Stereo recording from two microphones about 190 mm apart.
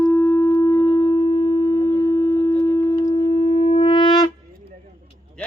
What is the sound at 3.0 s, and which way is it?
Shofar, 40° left (ahead or behind).